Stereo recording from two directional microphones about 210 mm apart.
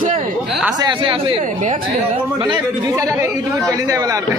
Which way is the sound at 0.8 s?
25° right (ahead or behind).